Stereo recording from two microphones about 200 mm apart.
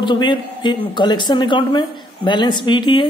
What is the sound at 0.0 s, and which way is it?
A woman's voice, 25° left (ahead or behind).